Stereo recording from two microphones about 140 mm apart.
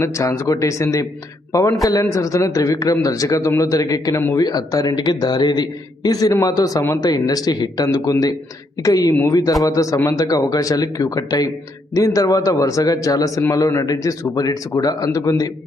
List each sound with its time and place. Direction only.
0.0 s a man's voice: 20° left (ahead or behind)